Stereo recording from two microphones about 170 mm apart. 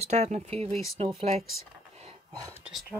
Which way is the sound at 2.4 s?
15° right (ahead or behind).